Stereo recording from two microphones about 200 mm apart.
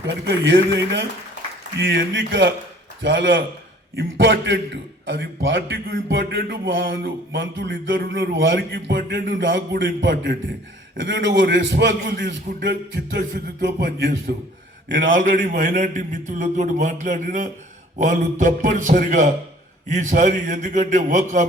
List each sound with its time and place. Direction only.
0.3 s a man's voice: 60° right (ahead or behind)
7.7 s a man's voice: 50° right (ahead or behind)
12.0 s a sound: 45° right (ahead or behind)
14.8 s a man's voice: 70° right (ahead or behind)
15.1 s a man's voice: 40° right (ahead or behind)